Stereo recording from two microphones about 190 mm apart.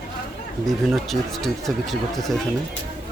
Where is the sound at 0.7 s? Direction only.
Centre (ahead or behind).